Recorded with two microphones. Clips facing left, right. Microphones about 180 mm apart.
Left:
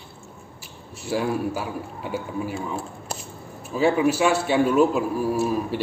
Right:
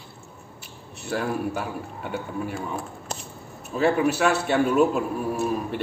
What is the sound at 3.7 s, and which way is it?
A man's voice, centre (ahead or behind).